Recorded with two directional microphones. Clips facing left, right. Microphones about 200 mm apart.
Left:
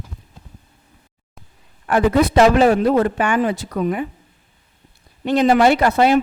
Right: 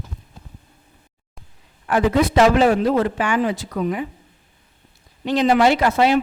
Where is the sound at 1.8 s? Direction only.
50° left (ahead or behind).